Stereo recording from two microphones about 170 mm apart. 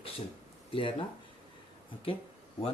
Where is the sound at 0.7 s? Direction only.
30° left (ahead or behind).